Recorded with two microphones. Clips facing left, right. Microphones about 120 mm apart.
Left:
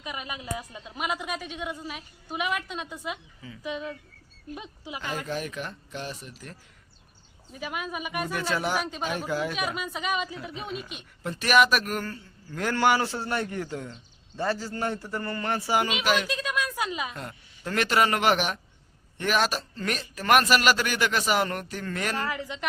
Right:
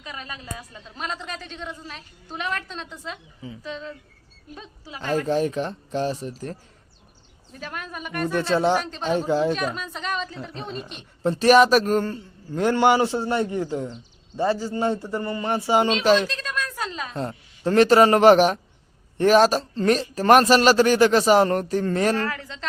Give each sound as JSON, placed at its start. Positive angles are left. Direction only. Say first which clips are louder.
{"t": 0.0, "sound": "a woman's voice", "louder": "left 1 dB", "side_deg": 15}
{"t": 4.9, "sound": "a man's voice", "louder": "right 10 dB", "side_deg": -35}
{"t": 7.5, "sound": "a woman's voice", "louder": "left 1 dB", "side_deg": 10}
{"t": 8.3, "sound": "speech", "louder": "right 9 dB", "side_deg": -25}
{"t": 8.8, "sound": "a woman's voice", "louder": "even", "side_deg": 10}
{"t": 9.0, "sound": "speech", "louder": "right 12 dB", "side_deg": -25}
{"t": 9.6, "sound": "a woman's voice", "louder": "right 2 dB", "side_deg": 10}
{"t": 11.2, "sound": "a man's voice", "louder": "right 7 dB", "side_deg": -30}
{"t": 16.3, "sound": "a woman's voice", "louder": "left 1 dB", "side_deg": 10}
{"t": 17.2, "sound": "a man's voice", "louder": "right 10 dB", "side_deg": -30}
{"t": 22.3, "sound": "a woman's voice", "louder": "even", "side_deg": 15}